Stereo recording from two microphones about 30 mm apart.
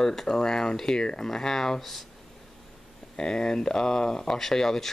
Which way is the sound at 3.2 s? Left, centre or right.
Left.